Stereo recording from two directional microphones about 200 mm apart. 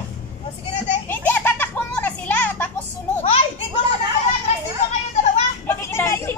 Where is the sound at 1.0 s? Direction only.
10° left (ahead or behind).